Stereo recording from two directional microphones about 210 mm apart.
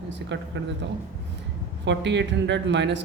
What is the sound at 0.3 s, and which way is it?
Speech, 60° right (ahead or behind).